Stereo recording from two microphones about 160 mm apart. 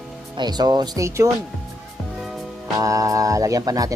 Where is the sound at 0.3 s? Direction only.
25° right (ahead or behind).